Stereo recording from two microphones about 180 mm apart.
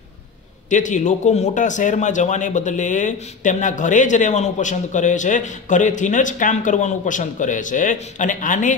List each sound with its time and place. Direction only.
0.7 s speech: 45° left (ahead or behind)